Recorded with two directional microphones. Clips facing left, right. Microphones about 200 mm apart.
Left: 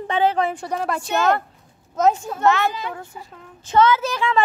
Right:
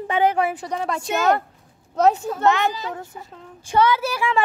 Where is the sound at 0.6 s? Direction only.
5° left (ahead or behind).